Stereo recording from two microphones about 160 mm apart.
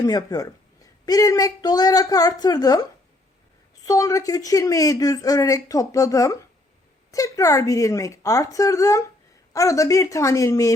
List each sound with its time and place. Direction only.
0.0 s speech: 25° left (ahead or behind)
3.8 s speech: 20° left (ahead or behind)